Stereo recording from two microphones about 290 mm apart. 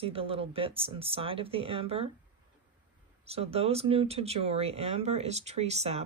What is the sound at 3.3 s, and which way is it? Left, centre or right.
Speech, right.